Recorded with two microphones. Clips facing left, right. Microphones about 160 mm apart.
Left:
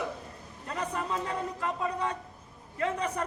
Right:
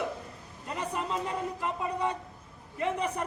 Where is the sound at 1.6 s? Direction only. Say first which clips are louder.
Even; 10° right (ahead or behind).